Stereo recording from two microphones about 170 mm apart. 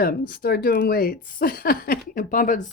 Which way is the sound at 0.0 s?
65° left (ahead or behind).